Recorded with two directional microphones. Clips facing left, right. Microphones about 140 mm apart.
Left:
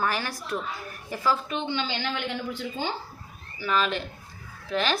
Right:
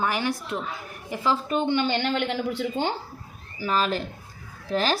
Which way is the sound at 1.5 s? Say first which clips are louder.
Right 6 dB; 50° right (ahead or behind).